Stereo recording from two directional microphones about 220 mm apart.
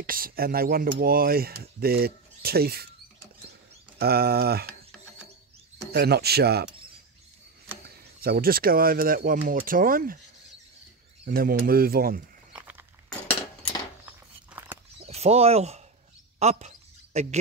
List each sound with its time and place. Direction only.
0.0 s speech: 40° right (ahead or behind)
4.0 s speech: 45° right (ahead or behind)
5.9 s speech: 45° right (ahead or behind)
7.8 s speech: 45° right (ahead or behind)
11.2 s speech: 40° right (ahead or behind)
12.5 s a sound: 5° right (ahead or behind)
14.0 s a sound: 10° right (ahead or behind)
15.0 s speech: 30° right (ahead or behind)
16.3 s a sound: 30° right (ahead or behind)